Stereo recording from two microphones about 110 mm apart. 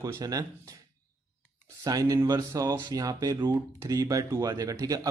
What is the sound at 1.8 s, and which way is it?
Speech, 30° right (ahead or behind).